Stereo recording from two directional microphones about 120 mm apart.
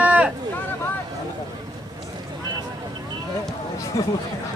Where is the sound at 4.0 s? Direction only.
25° left (ahead or behind).